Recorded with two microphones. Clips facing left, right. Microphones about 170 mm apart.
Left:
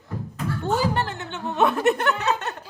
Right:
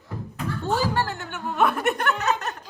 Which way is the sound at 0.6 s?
20° left (ahead or behind).